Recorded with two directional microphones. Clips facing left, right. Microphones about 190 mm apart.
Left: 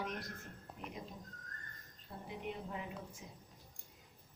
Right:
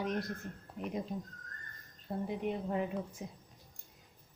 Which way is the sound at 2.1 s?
50° right (ahead or behind).